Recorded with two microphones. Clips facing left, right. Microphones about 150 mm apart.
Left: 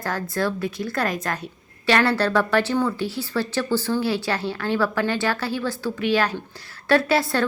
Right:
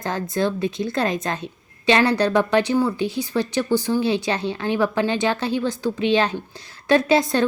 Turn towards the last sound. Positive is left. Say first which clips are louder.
# right 2 dB
turn(degrees=-20)  # may be behind; listen again after turning